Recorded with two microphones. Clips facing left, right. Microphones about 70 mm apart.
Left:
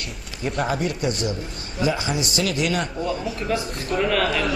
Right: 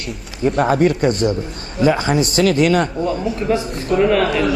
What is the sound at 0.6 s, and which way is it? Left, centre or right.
Speech, right.